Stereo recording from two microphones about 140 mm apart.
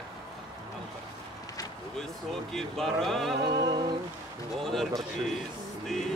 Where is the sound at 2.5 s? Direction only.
5° left (ahead or behind).